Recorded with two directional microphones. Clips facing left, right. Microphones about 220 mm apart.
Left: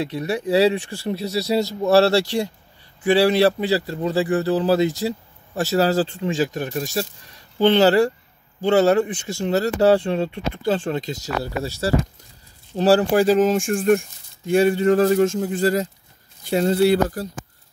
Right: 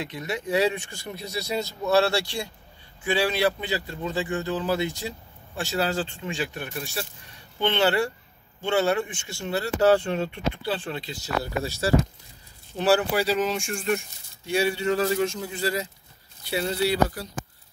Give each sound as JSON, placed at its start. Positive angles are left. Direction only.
{"t": 0.0, "sound": "a man's voice", "side_deg": 35}